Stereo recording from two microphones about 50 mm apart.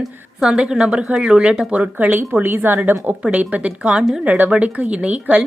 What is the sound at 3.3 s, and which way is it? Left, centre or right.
Speech, right.